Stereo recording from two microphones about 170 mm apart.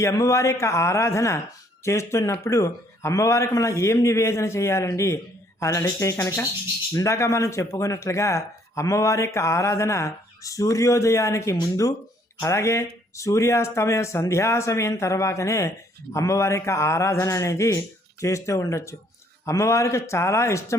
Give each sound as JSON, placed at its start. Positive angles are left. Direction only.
{"t": 0.0, "sound": "speech", "side_deg": 20}